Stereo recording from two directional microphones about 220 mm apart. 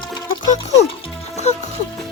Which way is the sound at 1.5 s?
30° left (ahead or behind).